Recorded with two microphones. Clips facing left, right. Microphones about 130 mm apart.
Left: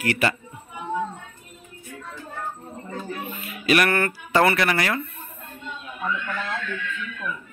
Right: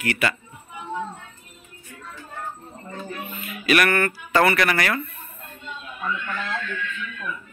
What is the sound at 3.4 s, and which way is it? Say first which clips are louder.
Speech: even; 25° left (ahead or behind).